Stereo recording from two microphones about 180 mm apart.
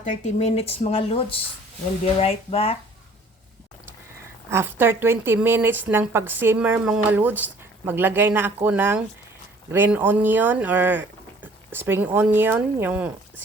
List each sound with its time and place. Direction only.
0.0 s speech: 40° left (ahead or behind)
4.5 s a woman's voice: 10° right (ahead or behind)